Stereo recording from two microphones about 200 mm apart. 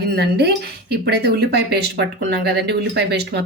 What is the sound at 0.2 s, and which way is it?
Speech, 55° right (ahead or behind).